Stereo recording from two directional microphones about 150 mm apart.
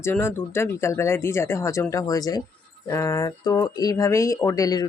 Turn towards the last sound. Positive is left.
turn(degrees=25)  # may be behind; listen again after turning